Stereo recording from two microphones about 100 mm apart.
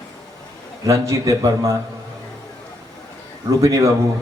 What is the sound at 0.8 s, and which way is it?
Speech, 35° right (ahead or behind).